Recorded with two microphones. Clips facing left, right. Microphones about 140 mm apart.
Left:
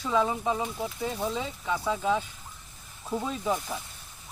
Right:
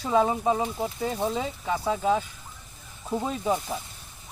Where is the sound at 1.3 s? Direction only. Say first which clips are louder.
Right 2 dB; 45° right (ahead or behind).